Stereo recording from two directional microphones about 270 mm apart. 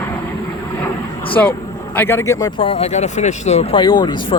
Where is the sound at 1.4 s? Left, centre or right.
Centre.